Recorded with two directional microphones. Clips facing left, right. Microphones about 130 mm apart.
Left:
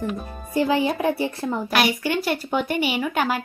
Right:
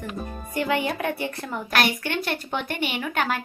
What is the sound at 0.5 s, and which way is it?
Speech, 25° left (ahead or behind).